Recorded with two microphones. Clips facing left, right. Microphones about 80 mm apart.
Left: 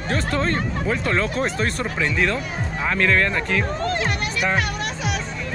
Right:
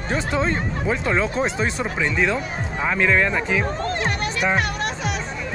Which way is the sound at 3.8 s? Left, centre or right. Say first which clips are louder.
Even; right.